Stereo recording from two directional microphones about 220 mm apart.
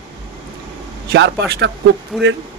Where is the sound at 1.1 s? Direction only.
50° right (ahead or behind).